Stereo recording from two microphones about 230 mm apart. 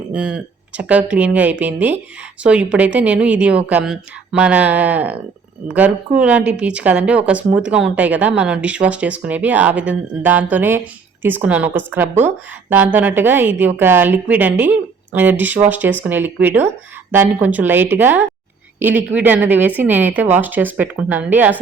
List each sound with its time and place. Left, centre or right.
0.1 s a woman's voice: centre